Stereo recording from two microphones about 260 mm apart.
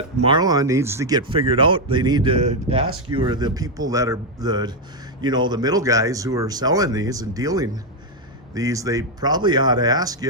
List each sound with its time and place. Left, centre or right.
0.2 s speech: centre